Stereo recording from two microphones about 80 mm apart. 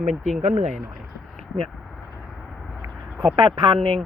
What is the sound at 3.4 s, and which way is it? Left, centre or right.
Speech, right.